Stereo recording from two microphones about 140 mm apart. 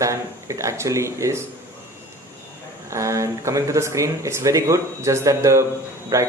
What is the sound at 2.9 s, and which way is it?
Speech, 20° right (ahead or behind).